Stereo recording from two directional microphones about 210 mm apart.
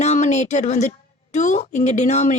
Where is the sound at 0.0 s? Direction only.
35° left (ahead or behind).